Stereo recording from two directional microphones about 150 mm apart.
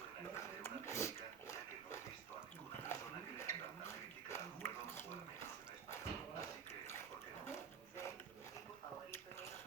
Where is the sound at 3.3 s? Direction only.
20° left (ahead or behind).